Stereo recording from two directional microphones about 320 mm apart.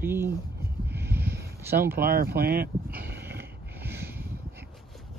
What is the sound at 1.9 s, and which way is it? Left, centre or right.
Speech, right.